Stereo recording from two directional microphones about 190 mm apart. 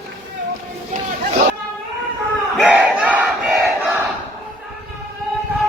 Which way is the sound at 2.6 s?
5° right (ahead or behind).